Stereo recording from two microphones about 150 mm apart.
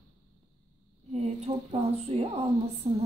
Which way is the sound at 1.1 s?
45° right (ahead or behind).